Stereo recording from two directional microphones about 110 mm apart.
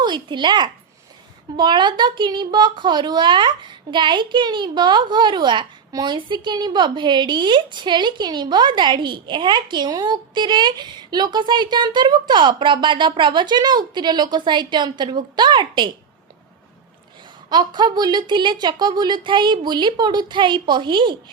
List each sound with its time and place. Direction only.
0.0 s a child's voice: 45° right (ahead or behind)
17.5 s a child's voice: 40° right (ahead or behind)